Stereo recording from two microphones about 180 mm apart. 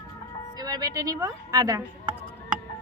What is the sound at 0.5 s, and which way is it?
Music, 20° right (ahead or behind).